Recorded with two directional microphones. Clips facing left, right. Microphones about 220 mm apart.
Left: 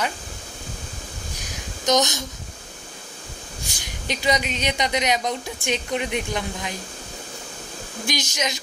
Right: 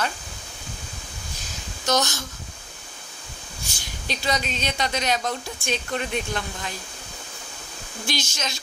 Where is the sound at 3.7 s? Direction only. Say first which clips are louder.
Left 2 dB; 15° left (ahead or behind).